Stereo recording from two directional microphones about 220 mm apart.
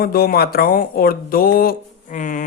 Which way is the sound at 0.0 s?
45° left (ahead or behind).